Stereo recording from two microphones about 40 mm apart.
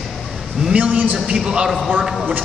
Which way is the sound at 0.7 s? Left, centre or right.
Right.